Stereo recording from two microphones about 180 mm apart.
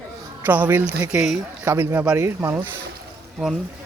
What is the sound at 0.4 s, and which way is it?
A man's voice, 10° right (ahead or behind).